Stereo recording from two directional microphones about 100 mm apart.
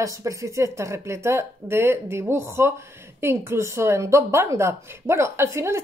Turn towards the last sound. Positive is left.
turn(degrees=-30)  # may be behind; listen again after turning